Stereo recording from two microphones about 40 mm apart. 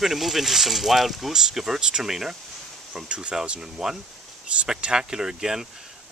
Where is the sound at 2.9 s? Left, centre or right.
Right.